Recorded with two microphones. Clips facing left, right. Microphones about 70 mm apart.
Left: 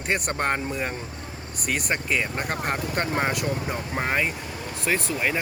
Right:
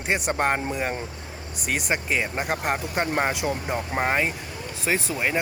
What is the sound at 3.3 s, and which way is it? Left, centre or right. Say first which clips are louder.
Speech: right 1 dB; centre.